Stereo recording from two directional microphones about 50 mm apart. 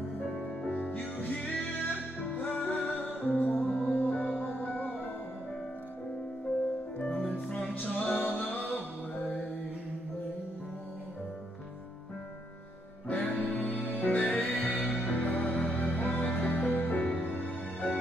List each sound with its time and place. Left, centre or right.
0.7 s music: left
7.2 s music: left
13.1 s music: left